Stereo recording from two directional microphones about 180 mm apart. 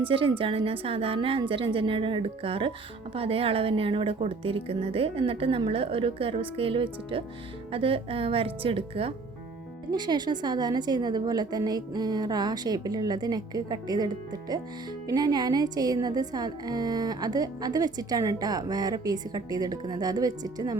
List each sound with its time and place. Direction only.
0.0 s a woman's voice: 30° right (ahead or behind)